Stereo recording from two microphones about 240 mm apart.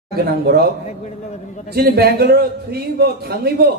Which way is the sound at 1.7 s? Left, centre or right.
Right.